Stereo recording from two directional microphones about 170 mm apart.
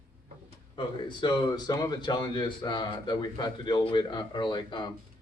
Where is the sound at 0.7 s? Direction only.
25° left (ahead or behind).